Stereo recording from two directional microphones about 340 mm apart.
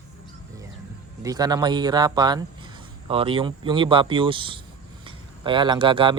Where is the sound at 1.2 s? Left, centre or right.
Centre.